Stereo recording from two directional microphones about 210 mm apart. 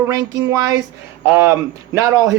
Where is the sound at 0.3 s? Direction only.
15° right (ahead or behind).